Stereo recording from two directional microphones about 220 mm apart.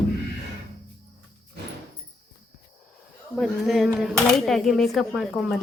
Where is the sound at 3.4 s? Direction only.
Centre (ahead or behind).